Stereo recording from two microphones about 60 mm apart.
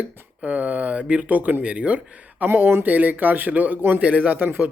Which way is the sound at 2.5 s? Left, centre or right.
Right.